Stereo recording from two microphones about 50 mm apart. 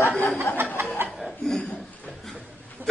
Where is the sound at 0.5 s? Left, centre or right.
Left.